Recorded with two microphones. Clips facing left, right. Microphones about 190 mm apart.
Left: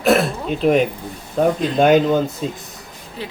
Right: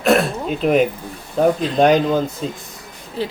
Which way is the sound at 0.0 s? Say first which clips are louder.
Even; centre (ahead or behind).